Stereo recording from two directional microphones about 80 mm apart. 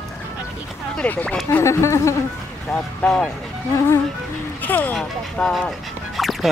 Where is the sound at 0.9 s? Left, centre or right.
Centre.